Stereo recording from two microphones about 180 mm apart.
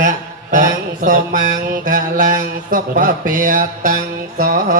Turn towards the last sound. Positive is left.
turn(degrees=-50)  # may be behind; listen again after turning